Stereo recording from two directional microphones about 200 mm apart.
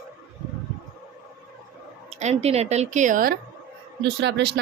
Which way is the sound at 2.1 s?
35° right (ahead or behind).